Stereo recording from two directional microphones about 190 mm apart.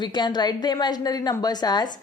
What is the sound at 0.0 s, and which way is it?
A woman's voice, 25° left (ahead or behind).